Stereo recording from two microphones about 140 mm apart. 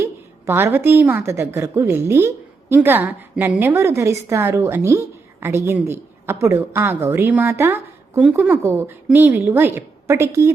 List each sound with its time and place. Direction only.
0.0 s a woman's voice: 15° right (ahead or behind)